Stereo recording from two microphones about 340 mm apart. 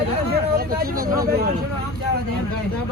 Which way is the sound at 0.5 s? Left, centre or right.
Right.